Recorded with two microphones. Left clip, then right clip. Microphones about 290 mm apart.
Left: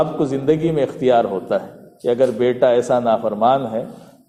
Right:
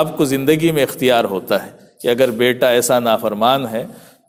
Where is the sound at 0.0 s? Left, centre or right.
Right.